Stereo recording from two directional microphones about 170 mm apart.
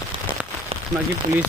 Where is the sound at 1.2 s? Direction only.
55° right (ahead or behind).